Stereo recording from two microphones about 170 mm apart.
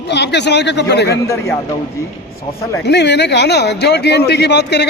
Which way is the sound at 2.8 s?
85° left.